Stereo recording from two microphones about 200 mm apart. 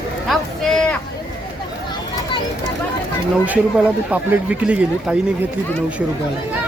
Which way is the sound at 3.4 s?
10° right (ahead or behind).